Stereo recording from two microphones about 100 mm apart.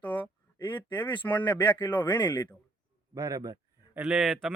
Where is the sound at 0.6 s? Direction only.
50° left (ahead or behind).